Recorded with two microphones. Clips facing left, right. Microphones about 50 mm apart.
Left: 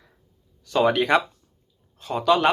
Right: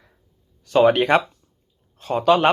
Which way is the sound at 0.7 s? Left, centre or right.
Centre.